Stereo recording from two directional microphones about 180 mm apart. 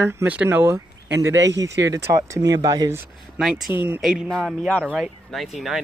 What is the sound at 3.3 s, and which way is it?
Speech, centre (ahead or behind).